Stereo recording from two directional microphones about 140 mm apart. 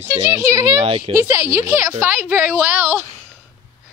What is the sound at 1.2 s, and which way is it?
A woman's voice, 20° right (ahead or behind).